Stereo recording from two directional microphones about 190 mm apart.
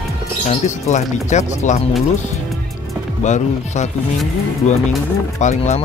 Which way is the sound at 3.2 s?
40° left (ahead or behind).